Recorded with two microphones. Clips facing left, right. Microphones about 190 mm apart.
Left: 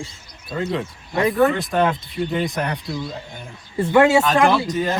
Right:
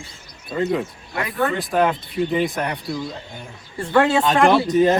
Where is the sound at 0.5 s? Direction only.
5° right (ahead or behind).